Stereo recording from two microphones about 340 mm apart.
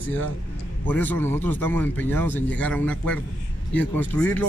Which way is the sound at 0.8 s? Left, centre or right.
Centre.